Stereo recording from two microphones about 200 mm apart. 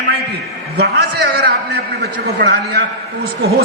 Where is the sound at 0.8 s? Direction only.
50° right (ahead or behind).